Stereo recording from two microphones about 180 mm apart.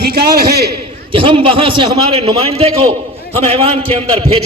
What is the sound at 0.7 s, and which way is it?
A man's voice, 30° right (ahead or behind).